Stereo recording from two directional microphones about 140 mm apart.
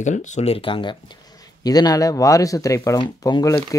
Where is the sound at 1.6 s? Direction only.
25° left (ahead or behind).